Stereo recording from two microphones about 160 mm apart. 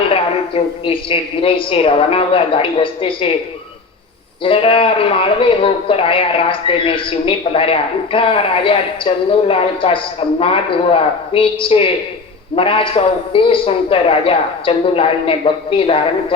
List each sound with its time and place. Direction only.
0.1 s speech: 35° left (ahead or behind)
4.4 s speech: 35° left (ahead or behind)